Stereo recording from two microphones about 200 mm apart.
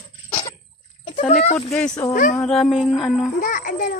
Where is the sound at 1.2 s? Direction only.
40° left (ahead or behind).